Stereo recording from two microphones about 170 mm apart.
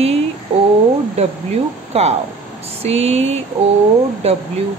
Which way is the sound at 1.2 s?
40° right (ahead or behind).